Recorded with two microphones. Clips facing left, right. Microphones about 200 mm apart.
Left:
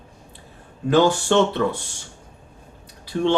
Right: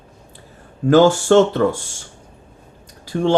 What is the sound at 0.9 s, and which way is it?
Speech, 45° right (ahead or behind).